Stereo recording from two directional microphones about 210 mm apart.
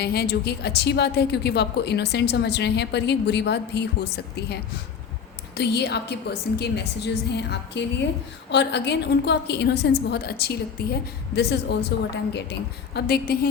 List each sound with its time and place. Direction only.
0.0 s a woman's voice: 50° left (ahead or behind)
5.5 s a woman's voice: 55° left (ahead or behind)